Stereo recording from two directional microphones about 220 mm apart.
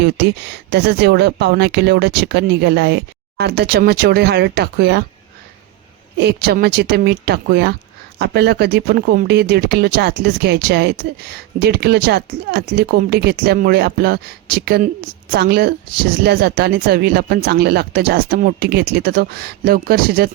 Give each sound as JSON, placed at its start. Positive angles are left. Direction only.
{"t": 0.0, "sound": "speech", "side_deg": -50}
{"t": 6.1, "sound": "speech", "side_deg": -45}